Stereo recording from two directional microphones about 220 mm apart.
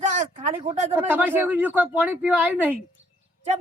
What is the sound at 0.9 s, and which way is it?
Speech, 10° right (ahead or behind).